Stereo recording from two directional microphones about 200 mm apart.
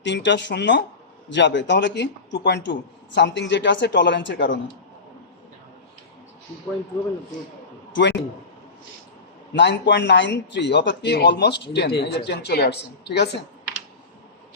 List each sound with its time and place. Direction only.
0.0 s speech: 60° left (ahead or behind)
7.9 s speech: 60° left (ahead or behind)
9.6 s speech: 60° left (ahead or behind)